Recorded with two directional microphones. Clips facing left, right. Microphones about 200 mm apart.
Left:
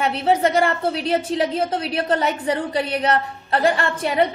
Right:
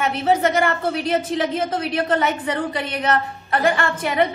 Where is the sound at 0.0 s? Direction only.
30° left (ahead or behind).